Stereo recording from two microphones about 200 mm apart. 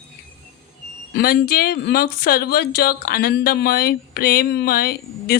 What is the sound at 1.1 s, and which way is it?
Speech, 50° left (ahead or behind).